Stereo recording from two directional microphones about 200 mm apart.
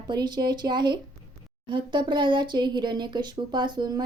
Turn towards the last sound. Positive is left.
turn(degrees=-20)  # may be behind; listen again after turning